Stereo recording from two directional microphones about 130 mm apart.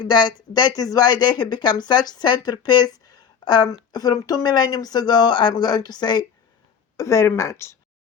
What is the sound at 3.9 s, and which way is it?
Speech, 30° left (ahead or behind).